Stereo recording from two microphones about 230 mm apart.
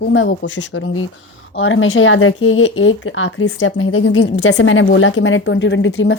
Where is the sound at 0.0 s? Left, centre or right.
Left.